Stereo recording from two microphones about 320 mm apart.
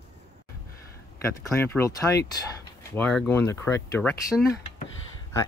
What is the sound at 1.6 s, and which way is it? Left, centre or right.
Speech, centre.